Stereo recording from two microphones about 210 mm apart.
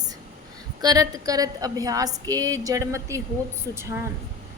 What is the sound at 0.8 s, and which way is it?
A woman's voice, 15° right (ahead or behind).